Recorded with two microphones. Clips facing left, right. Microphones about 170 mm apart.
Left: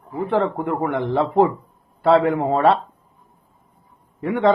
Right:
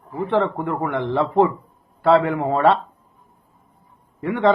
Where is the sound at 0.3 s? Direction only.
15° left (ahead or behind).